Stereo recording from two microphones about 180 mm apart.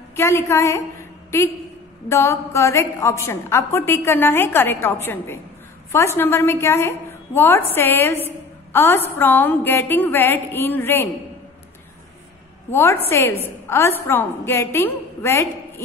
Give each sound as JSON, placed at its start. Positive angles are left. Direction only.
{"t": 0.1, "sound": "a woman's voice", "side_deg": 15}
{"t": 2.0, "sound": "a woman's voice", "side_deg": 15}
{"t": 12.7, "sound": "a woman's voice", "side_deg": 15}